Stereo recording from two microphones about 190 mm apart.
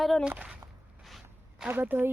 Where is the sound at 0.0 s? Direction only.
Centre (ahead or behind).